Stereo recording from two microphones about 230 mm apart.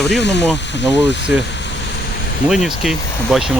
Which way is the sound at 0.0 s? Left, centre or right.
Left.